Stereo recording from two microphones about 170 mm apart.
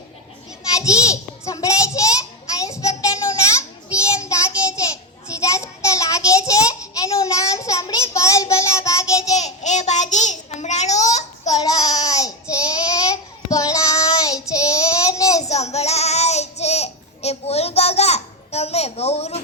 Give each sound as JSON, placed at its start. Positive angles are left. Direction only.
{"t": 0.9, "sound": "a sound", "side_deg": 20}
{"t": 2.6, "sound": "child singing", "side_deg": 20}
{"t": 9.3, "sound": "child singing", "side_deg": 45}
{"t": 11.5, "sound": "child singing", "side_deg": 20}
{"t": 15.4, "sound": "child singing", "side_deg": 40}